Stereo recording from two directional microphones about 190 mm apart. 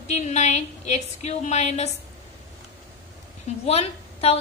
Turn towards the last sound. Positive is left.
turn(degrees=30)  # may be behind; listen again after turning